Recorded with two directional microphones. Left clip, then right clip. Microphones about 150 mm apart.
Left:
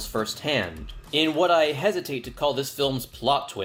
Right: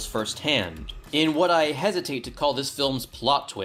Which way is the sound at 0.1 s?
30° right (ahead or behind).